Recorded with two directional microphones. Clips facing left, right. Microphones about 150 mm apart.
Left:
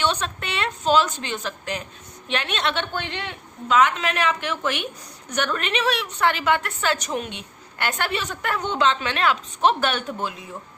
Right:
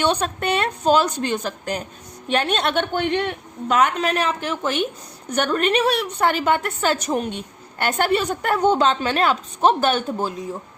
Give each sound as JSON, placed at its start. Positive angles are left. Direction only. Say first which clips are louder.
{"t": 0.0, "sound": "a woman's voice", "louder": "right 4 dB", "side_deg": -45}